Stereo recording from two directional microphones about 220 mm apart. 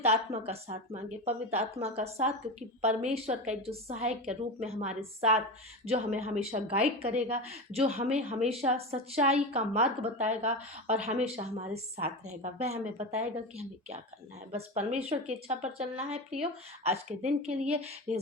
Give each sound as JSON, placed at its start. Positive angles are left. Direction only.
{"t": 0.0, "sound": "a woman's voice", "side_deg": -30}